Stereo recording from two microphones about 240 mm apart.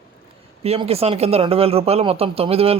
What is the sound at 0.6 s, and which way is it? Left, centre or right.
Speech, right.